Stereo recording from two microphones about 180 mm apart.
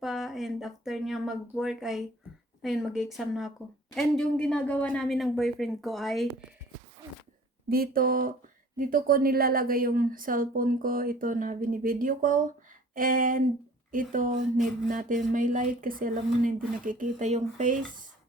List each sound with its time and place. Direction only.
0.0 s speech: centre (ahead or behind)
7.7 s a woman's voice: 55° right (ahead or behind)